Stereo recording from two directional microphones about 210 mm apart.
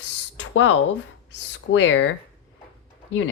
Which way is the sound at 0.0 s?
60° left (ahead or behind).